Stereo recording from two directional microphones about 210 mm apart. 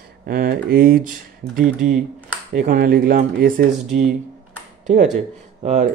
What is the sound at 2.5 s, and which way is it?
Speech, 40° right (ahead or behind).